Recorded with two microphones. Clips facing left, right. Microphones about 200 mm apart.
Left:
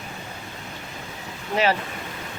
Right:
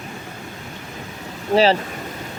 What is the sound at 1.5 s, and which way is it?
Speech, 30° right (ahead or behind).